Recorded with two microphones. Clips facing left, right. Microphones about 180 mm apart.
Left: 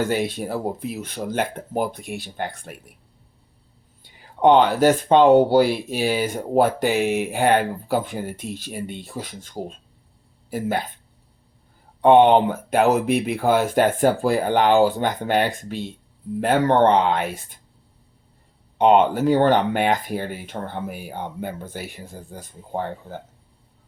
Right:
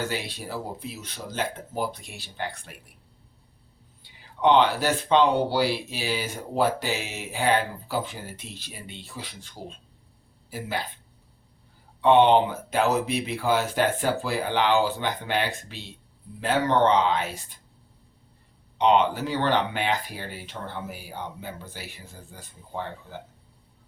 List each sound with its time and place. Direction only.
0.0 s speech: 50° left (ahead or behind)
4.0 s speech: 50° left (ahead or behind)
11.9 s speech: 50° left (ahead or behind)
18.8 s speech: 50° left (ahead or behind)